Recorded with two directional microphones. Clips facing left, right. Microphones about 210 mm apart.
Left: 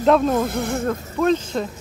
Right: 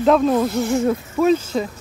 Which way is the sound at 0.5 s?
55° left (ahead or behind).